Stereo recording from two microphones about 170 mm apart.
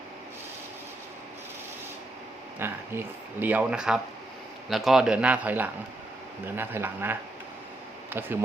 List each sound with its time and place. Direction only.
2.6 s speech: 15° right (ahead or behind)